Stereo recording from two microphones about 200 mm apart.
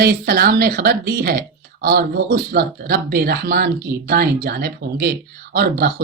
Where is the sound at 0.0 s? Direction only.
50° right (ahead or behind).